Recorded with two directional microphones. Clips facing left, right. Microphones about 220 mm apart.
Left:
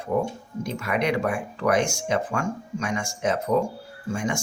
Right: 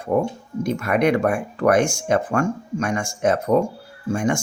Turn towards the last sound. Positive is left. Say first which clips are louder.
# right 6 dB
turn(degrees=-50)  # may be behind; listen again after turning